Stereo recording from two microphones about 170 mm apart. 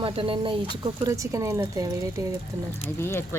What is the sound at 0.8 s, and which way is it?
Speech, 20° right (ahead or behind).